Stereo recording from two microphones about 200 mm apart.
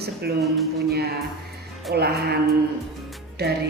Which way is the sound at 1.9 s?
55° right (ahead or behind).